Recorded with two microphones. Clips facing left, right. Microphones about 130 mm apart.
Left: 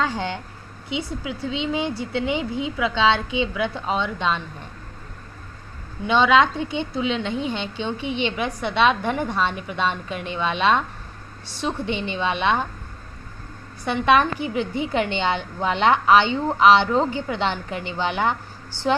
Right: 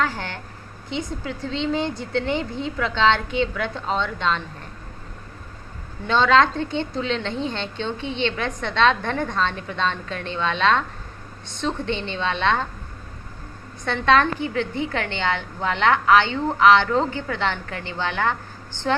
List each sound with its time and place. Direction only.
0.0 s a woman's voice: 20° left (ahead or behind)
6.0 s a woman's voice: 10° left (ahead or behind)
13.8 s a woman's voice: 15° left (ahead or behind)